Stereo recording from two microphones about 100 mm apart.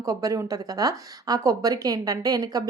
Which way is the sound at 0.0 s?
35° right (ahead or behind).